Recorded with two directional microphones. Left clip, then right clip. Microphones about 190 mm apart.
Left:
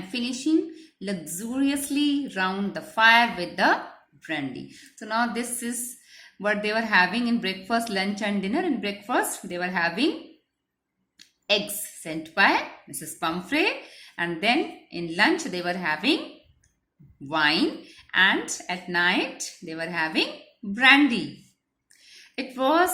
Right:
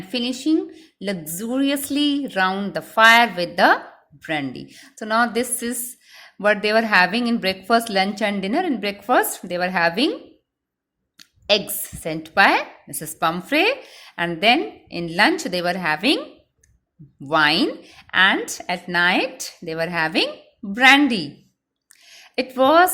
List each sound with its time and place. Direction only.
0.1 s speech: 35° right (ahead or behind)
11.2 s speech: 35° right (ahead or behind)
17.2 s speech: 40° right (ahead or behind)
22.0 s a sound: 35° right (ahead or behind)